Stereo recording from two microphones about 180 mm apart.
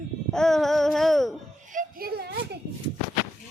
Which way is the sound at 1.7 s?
50° right (ahead or behind).